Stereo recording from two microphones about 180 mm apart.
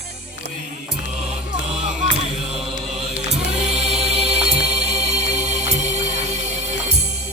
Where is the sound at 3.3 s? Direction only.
40° right (ahead or behind).